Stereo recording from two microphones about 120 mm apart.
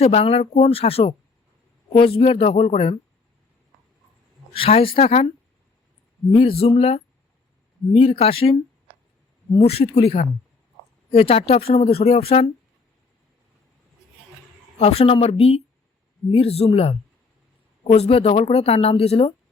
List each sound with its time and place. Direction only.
0.0 s speech: 55° left (ahead or behind)
4.5 s speech: 50° left (ahead or behind)
6.3 s speech: 50° left (ahead or behind)
14.8 s speech: 55° left (ahead or behind)